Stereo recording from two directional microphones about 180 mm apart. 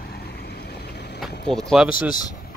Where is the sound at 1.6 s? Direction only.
Centre (ahead or behind).